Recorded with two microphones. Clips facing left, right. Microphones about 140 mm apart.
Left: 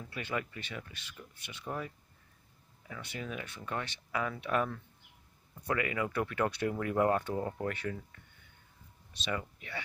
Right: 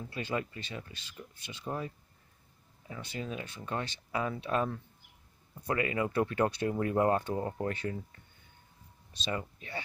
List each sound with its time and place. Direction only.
0.0 s speech: 30° right (ahead or behind)
9.2 s speech: 30° right (ahead or behind)